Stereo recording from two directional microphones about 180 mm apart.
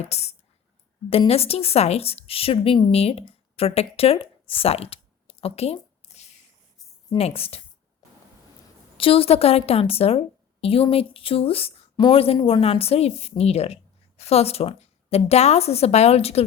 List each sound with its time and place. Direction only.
0.1 s a woman's voice: 35° left (ahead or behind)
9.0 s a woman's voice: 30° left (ahead or behind)